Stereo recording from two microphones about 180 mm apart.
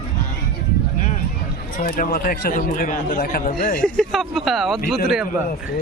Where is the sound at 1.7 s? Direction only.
45° left (ahead or behind).